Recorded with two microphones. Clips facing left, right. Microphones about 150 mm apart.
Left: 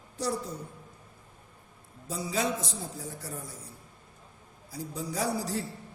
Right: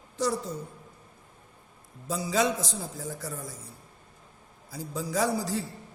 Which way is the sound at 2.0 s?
90° right.